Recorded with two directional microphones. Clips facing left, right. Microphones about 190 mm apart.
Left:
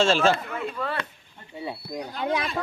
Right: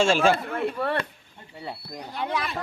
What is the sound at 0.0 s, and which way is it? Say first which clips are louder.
Speech: even; 10° right (ahead or behind).